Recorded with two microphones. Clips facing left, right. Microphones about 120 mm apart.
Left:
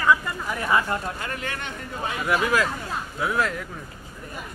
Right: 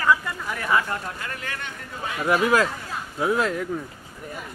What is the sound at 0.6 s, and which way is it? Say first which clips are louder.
Speech: even; 15° left (ahead or behind).